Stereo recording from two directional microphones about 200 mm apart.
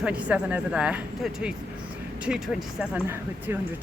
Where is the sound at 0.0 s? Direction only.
5° right (ahead or behind).